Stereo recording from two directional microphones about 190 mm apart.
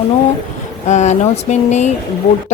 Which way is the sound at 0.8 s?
40° left (ahead or behind).